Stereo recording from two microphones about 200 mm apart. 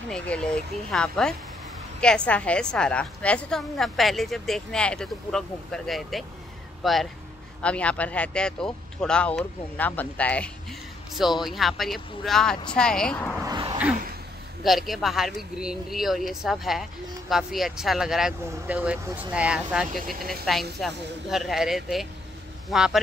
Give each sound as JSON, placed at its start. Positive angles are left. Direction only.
{"t": 0.1, "sound": "a woman's voice", "side_deg": 5}
{"t": 13.4, "sound": "a sound", "side_deg": -20}
{"t": 14.6, "sound": "a woman's voice", "side_deg": 0}